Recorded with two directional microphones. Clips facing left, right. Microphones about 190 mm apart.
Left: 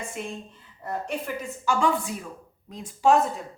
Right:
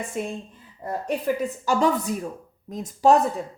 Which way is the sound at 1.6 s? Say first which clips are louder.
Right 2 dB; 40° right (ahead or behind).